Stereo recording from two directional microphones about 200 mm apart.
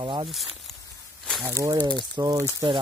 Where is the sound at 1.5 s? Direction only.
15° right (ahead or behind).